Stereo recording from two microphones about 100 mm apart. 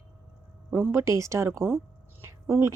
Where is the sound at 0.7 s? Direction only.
25° right (ahead or behind).